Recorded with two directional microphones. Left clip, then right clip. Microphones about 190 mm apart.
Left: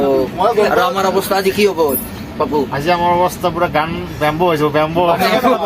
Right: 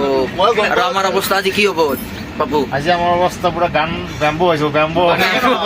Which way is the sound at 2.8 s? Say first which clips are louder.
Left 2 dB; 30° left (ahead or behind).